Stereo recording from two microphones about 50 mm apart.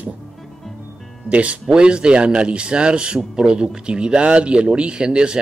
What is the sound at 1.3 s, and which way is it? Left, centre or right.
A man's voice, right.